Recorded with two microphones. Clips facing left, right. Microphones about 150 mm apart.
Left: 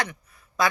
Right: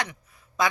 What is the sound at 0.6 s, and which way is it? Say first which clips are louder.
Quack: left 1 dB; 20° right (ahead or behind).